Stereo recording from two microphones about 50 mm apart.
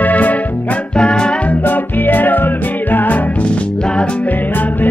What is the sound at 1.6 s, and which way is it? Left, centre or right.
Music, left.